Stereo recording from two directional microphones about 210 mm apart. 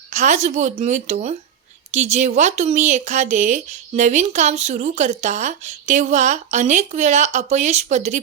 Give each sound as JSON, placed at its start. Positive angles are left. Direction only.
{"t": 0.1, "sound": "speech", "side_deg": -35}